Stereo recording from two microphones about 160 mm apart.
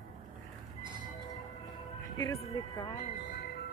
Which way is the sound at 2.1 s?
20° left (ahead or behind).